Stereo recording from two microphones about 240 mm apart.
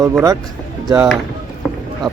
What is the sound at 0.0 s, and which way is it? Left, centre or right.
Speech, centre.